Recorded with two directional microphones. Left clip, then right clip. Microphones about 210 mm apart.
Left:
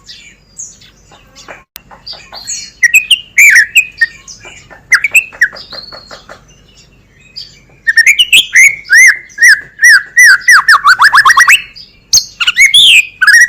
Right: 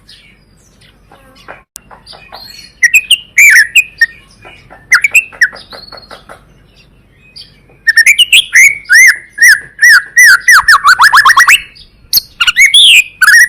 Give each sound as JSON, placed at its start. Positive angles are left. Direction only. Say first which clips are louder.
{"t": 2.8, "sound": "bird", "louder": "even", "side_deg": -20}
{"t": 4.9, "sound": "bird", "louder": "right 1 dB", "side_deg": -20}
{"t": 7.9, "sound": "bird", "louder": "right 1 dB", "side_deg": -20}